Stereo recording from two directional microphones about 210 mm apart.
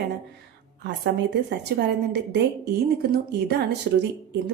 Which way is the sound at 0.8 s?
55° right (ahead or behind).